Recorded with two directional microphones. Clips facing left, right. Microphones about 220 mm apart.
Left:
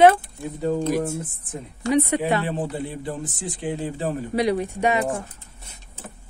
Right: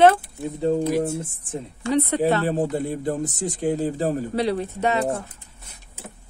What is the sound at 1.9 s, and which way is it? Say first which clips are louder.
Speech: even; 10° left (ahead or behind).